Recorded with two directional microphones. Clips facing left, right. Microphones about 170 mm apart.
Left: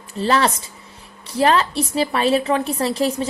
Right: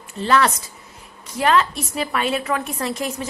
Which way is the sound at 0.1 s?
35° left (ahead or behind).